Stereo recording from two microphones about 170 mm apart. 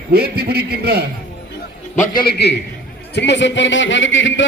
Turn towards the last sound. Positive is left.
turn(degrees=90)